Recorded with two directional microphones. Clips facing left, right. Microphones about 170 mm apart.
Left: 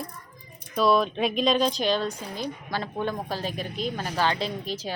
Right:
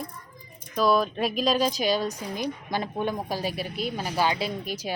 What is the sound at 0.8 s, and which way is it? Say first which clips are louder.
A woman's voice: left 1 dB; centre (ahead or behind).